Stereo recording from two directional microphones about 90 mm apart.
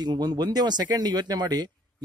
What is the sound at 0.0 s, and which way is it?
Speech, 50° right (ahead or behind).